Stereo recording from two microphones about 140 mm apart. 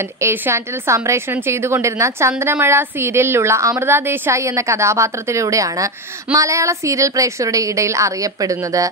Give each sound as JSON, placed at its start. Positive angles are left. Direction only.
{"t": 0.2, "sound": "a woman's voice", "side_deg": -20}